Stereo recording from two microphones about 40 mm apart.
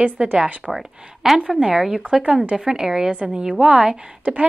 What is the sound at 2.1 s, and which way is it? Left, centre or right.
Speech, centre.